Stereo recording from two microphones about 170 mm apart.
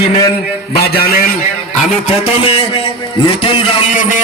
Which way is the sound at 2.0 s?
35° left (ahead or behind).